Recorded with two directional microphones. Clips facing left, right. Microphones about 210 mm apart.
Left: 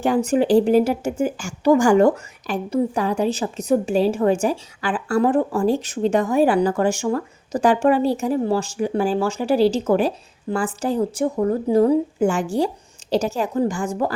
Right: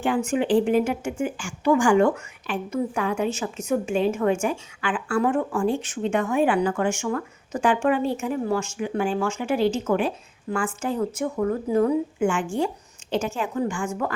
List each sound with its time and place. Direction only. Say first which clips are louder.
0.3 s speech: left 5 dB; 40° left (ahead or behind)